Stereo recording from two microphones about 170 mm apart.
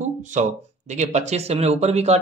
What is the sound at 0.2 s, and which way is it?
Speech, 45° right (ahead or behind).